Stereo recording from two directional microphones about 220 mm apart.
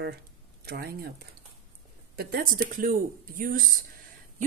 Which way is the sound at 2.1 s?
40° right (ahead or behind).